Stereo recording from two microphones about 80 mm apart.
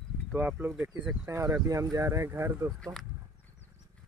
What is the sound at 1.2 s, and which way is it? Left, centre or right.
Speech, right.